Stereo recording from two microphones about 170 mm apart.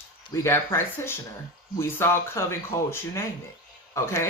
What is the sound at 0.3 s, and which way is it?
Speech, 15° left (ahead or behind).